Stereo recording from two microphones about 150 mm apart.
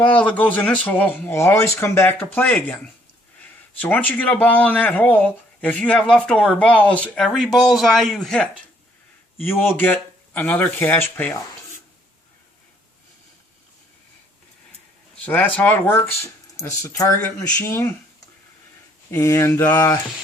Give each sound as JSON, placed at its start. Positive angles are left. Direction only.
{"t": 0.0, "sound": "speech", "side_deg": 10}
{"t": 3.8, "sound": "speech", "side_deg": 10}
{"t": 9.4, "sound": "speech", "side_deg": 15}
{"t": 15.2, "sound": "speech", "side_deg": 10}
{"t": 19.1, "sound": "a sound", "side_deg": 20}